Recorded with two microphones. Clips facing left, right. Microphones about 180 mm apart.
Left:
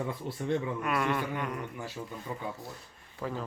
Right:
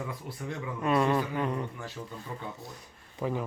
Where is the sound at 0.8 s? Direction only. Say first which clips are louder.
Right 4 dB; 30° right (ahead or behind).